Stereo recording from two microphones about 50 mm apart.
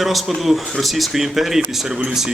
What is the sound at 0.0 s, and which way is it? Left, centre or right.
Speech, centre.